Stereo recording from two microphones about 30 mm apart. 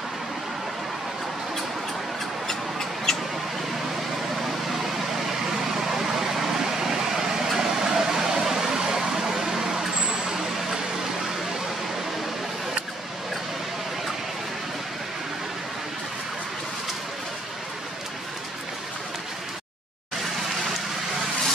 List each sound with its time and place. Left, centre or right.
2.4 s mouse: centre
5.5 s vehicle: centre
7.5 s a sound: centre
10.3 s vehicle: right